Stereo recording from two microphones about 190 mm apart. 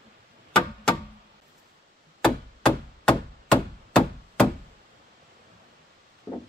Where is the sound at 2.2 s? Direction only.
5° left (ahead or behind).